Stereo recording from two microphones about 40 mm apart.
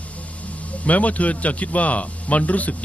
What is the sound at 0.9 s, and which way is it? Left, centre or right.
A man's voice, left.